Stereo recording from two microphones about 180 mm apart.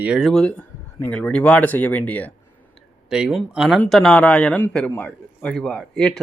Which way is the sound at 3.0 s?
5° right (ahead or behind).